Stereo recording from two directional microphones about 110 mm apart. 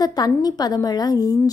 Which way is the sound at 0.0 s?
40° left (ahead or behind).